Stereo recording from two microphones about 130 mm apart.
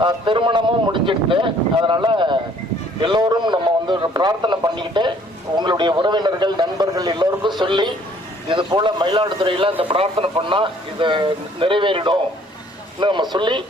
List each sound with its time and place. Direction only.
0.0 s a man's voice: 40° right (ahead or behind)